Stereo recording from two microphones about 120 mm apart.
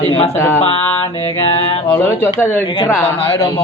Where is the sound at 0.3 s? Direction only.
25° left (ahead or behind).